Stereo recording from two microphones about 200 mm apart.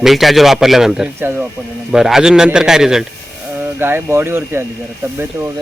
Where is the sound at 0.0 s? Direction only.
Centre (ahead or behind).